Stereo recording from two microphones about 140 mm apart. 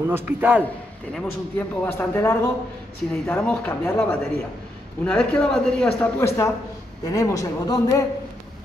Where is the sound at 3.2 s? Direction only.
5° left (ahead or behind).